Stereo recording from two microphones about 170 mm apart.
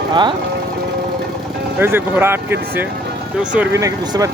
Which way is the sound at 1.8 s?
15° right (ahead or behind).